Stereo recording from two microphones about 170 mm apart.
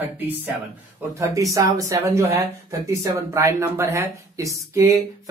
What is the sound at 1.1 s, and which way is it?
Speech, 20° right (ahead or behind).